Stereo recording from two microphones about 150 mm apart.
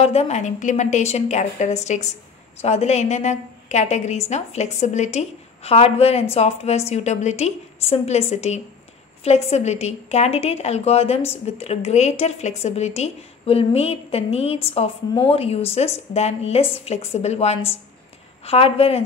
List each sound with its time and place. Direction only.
0.0 s a woman's voice: 45° left (ahead or behind)